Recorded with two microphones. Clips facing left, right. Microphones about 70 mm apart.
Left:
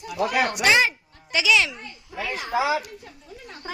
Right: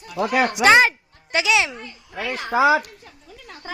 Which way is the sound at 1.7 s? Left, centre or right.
Right.